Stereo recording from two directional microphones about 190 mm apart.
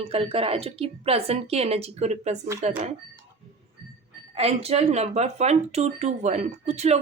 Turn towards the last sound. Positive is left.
turn(degrees=-35)  # may be behind; listen again after turning